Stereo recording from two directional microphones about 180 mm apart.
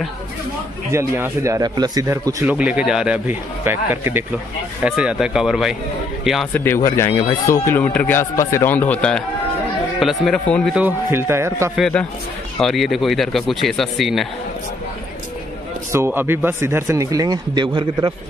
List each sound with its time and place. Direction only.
0.9 s speech: 15° right (ahead or behind)
2.4 s speech: 5° right (ahead or behind)
6.5 s a man's voice: 10° left (ahead or behind)
10.7 s speech: 10° right (ahead or behind)
11.7 s speech: 5° left (ahead or behind)
15.9 s speech: 10° right (ahead or behind)